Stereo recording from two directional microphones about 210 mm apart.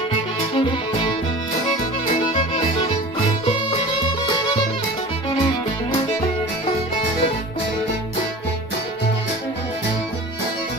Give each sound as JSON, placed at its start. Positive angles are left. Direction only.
{"t": 0.6, "sound": "music", "side_deg": 25}